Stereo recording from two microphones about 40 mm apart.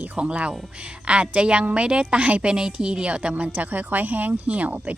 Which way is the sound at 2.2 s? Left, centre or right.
Right.